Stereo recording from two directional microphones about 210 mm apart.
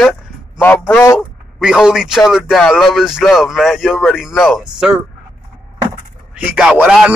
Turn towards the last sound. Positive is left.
turn(degrees=-5)  # may be behind; listen again after turning